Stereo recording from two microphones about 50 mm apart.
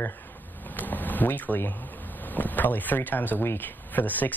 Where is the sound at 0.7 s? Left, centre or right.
Left.